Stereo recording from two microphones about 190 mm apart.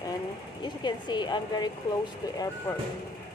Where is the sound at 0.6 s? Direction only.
25° left (ahead or behind).